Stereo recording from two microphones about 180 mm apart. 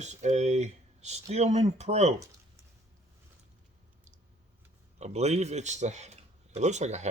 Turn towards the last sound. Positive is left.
turn(degrees=-40)  # may be behind; listen again after turning